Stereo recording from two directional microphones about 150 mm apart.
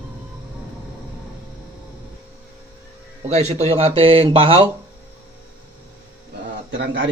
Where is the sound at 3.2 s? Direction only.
45° right (ahead or behind).